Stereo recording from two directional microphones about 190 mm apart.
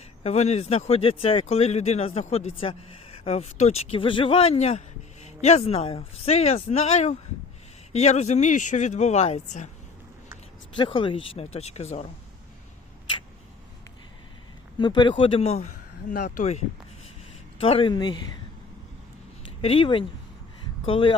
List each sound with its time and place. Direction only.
0.2 s speech: 35° left (ahead or behind)
10.8 s speech: 25° left (ahead or behind)
14.8 s speech: 25° left (ahead or behind); by 16.6 s 40° left (ahead or behind)
17.6 s speech: 30° left (ahead or behind)
19.6 s speech: 30° left (ahead or behind)